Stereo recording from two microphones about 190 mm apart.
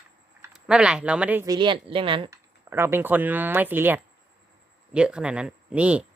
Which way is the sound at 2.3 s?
15° right (ahead or behind).